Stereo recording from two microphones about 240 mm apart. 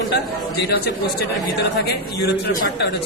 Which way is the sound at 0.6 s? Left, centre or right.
Left.